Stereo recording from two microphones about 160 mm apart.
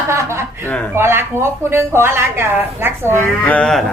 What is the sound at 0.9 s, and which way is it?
A woman's voice, 15° right (ahead or behind).